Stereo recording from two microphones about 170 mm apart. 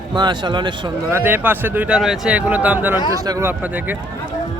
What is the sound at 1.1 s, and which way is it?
Speech, 15° right (ahead or behind).